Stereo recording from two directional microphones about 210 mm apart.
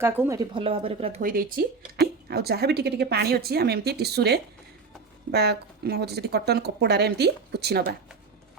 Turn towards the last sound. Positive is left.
turn(degrees=-50)  # may be behind; listen again after turning